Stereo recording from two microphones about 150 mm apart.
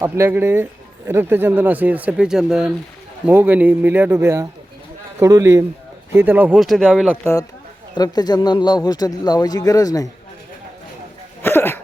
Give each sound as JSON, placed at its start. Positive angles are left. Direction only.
{"t": 0.0, "sound": "a man's voice", "side_deg": -15}
{"t": 7.9, "sound": "speech", "side_deg": 25}
{"t": 11.4, "sound": "a sound", "side_deg": 15}